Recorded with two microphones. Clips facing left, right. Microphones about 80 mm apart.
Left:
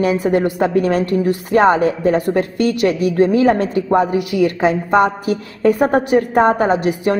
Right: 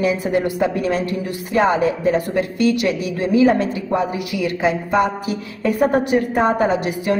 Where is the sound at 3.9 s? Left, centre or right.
Left.